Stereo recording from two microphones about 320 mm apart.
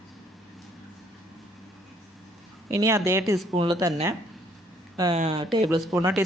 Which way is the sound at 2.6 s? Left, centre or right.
Centre.